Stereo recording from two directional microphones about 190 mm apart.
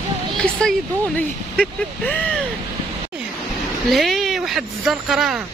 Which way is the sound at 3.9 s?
Centre (ahead or behind).